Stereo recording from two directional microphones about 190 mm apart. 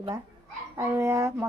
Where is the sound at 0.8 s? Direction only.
15° right (ahead or behind).